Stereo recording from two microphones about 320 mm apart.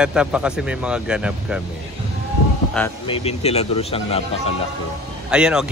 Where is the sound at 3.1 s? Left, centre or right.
Centre.